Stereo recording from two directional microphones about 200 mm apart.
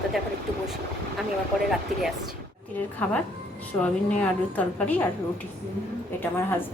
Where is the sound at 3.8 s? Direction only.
5° left (ahead or behind).